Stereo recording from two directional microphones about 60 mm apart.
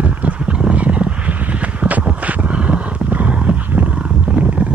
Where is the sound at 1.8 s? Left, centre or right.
Right.